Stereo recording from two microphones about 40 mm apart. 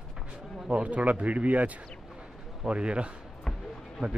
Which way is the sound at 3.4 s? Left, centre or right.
Centre.